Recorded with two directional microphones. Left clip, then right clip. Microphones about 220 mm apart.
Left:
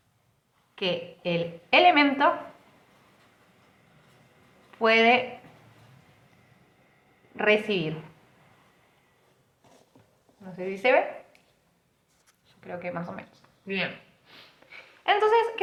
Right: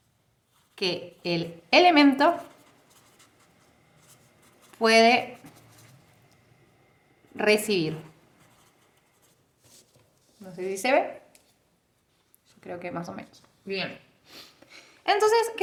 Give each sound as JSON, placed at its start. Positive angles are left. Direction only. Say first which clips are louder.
{"t": 0.8, "sound": "a woman's voice", "louder": "even", "side_deg": -60}
{"t": 4.7, "sound": "speech", "louder": "right 1 dB", "side_deg": -60}
{"t": 7.3, "sound": "a woman's voice", "louder": "even", "side_deg": -60}
{"t": 10.4, "sound": "speech", "louder": "left 3 dB", "side_deg": -55}
{"t": 12.5, "sound": "a woman's voice", "louder": "left 1 dB", "side_deg": -60}
{"t": 14.3, "sound": "a sound", "louder": "right 4 dB", "side_deg": -60}